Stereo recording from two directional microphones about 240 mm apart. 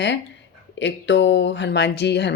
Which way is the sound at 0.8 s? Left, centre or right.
Left.